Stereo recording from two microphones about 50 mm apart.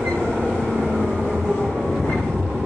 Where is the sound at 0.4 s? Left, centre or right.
Centre.